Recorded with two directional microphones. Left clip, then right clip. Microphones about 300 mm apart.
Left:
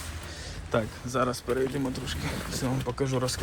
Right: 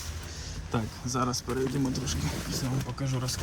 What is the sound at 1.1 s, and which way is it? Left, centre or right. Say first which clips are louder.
Speech: left 3 dB; centre.